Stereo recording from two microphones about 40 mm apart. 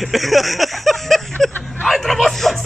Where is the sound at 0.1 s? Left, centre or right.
Centre.